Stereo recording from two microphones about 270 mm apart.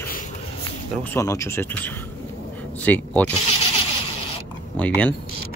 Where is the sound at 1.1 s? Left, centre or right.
Centre.